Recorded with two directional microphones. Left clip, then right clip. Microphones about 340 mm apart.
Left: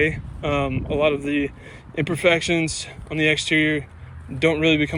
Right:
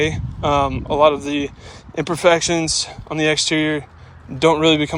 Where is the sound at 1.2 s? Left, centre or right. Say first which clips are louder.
Right 1 dB; right.